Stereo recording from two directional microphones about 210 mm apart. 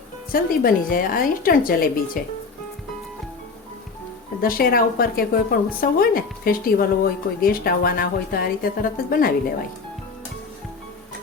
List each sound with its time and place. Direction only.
0.3 s a woman's voice: 45° left (ahead or behind)
4.4 s a woman's voice: 45° left (ahead or behind)